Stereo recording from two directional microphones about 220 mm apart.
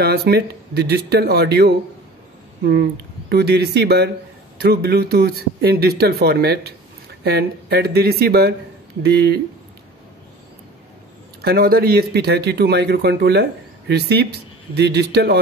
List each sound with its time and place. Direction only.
0.0 s speech: 45° right (ahead or behind)
11.4 s speech: 45° right (ahead or behind)